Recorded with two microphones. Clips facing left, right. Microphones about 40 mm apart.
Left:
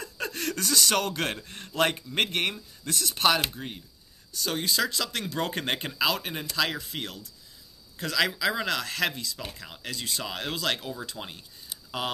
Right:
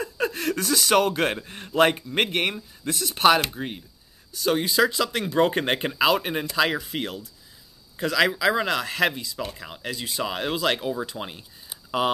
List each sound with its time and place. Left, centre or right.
0.0 s speech: centre